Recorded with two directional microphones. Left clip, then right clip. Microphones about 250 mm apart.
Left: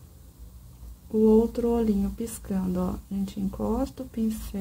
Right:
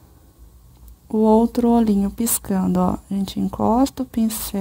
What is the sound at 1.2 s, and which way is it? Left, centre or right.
Speech, right.